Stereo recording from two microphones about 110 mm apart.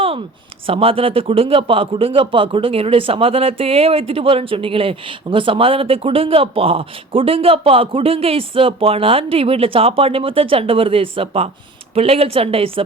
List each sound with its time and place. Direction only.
0.7 s a man's voice: 60° right (ahead or behind)